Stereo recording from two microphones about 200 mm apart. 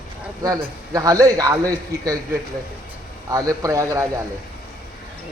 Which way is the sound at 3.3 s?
15° right (ahead or behind).